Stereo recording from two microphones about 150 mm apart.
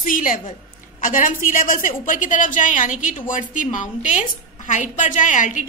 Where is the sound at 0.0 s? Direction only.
65° left (ahead or behind).